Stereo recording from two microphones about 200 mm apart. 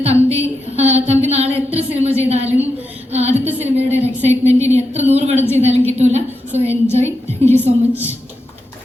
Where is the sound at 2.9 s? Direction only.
30° right (ahead or behind).